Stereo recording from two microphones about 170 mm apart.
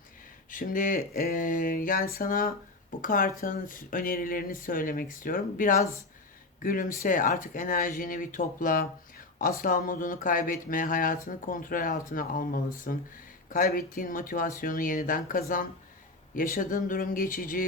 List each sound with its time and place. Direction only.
0.5 s speech: 55° left (ahead or behind)